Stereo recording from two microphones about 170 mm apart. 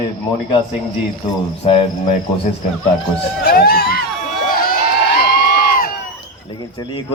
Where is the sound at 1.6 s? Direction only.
35° left (ahead or behind).